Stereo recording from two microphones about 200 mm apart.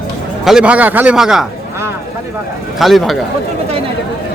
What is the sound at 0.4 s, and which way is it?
Speech, 5° right (ahead or behind).